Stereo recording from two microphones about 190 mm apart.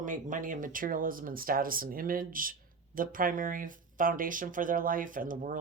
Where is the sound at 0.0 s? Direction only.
45° right (ahead or behind).